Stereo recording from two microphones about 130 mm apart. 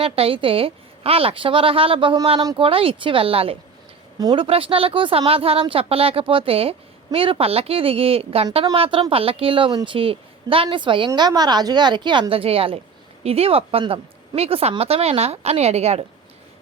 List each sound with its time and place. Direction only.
0.0 s a woman's voice: 45° right (ahead or behind)